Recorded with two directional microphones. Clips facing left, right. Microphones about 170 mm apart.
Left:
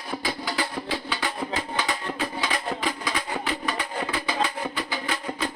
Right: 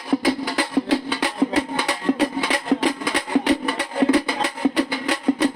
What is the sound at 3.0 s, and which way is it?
Music, 75° right (ahead or behind).